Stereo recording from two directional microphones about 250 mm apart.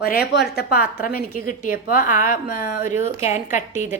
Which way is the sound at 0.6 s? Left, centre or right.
Left.